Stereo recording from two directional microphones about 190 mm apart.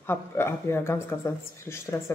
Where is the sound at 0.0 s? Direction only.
10° left (ahead or behind).